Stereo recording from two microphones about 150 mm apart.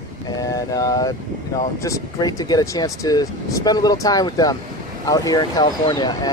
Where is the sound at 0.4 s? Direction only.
25° left (ahead or behind).